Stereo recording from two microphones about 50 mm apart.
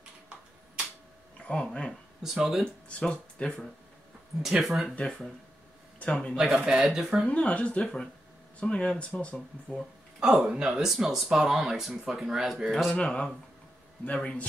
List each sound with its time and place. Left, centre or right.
1.5 s speech: centre
2.2 s speech: centre
2.9 s speech: left
4.4 s speech: centre
4.6 s speech: centre
5.9 s speech: left
6.3 s speech: centre
7.2 s speech: left
10.2 s speech: centre
12.9 s speech: centre